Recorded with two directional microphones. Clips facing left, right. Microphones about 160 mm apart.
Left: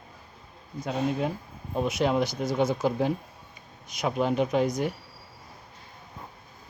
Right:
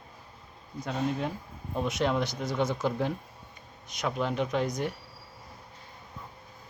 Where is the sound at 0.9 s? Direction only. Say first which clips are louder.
Left 3 dB; 10° left (ahead or behind).